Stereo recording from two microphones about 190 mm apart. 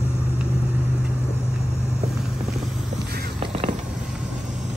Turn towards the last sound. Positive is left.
turn(degrees=-30)  # may be behind; listen again after turning